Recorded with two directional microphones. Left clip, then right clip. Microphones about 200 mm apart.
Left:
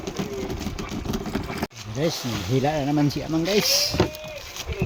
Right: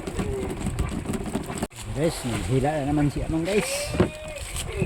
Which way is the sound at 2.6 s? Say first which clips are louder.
Left 2 dB; 10° left (ahead or behind).